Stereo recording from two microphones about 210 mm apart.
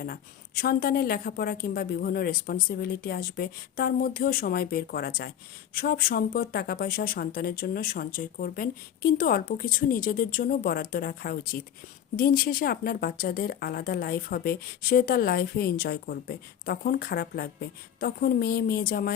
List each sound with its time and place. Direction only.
0.0 s a woman's voice: 45° left (ahead or behind)